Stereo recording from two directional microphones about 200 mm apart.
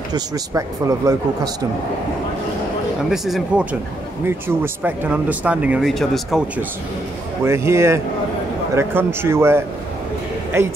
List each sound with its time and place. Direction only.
0.1 s speech: 15° right (ahead or behind)
3.1 s speech: centre (ahead or behind)
4.8 s speech: 5° right (ahead or behind)